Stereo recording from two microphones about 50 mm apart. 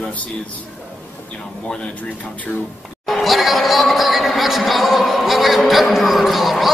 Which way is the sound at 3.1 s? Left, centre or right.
Centre.